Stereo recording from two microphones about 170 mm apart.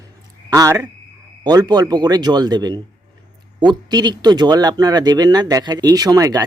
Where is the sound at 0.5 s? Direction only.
20° right (ahead or behind).